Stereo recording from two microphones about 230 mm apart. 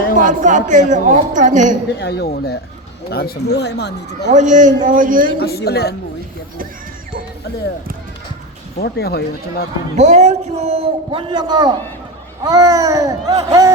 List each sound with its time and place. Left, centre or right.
0.2 s a woman's voice: right
2.0 s speech: left
4.3 s a woman's voice: right
5.4 s speech: left
8.8 s speech: left
10.0 s a man's voice: right; by 13.7 s centre